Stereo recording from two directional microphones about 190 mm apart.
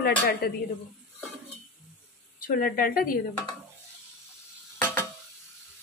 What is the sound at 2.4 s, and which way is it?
Speech, 45° left (ahead or behind).